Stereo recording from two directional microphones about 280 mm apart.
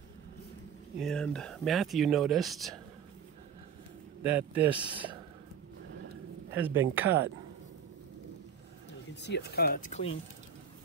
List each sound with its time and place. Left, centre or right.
0.9 s speech: centre
4.2 s speech: centre
4.6 s speech: centre
6.5 s speech: centre
9.1 s speech: left